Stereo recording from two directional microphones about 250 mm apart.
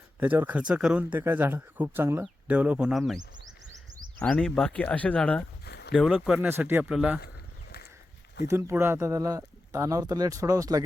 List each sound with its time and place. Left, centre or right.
0.2 s speech: centre
4.2 s speech: centre
5.6 s a sound: left
5.9 s speech: centre
8.4 s speech: centre